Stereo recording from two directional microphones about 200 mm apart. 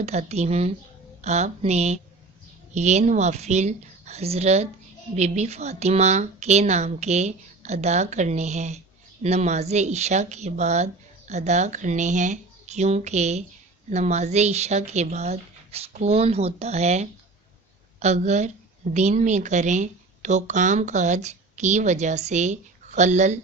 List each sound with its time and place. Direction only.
0.0 s a woman's voice: 35° right (ahead or behind)